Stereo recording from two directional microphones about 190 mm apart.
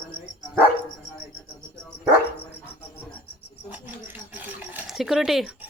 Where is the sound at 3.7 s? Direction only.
10° right (ahead or behind).